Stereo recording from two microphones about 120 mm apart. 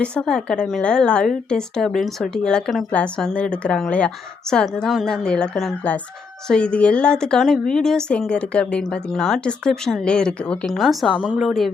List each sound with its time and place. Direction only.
0.0 s a woman's voice: 10° left (ahead or behind)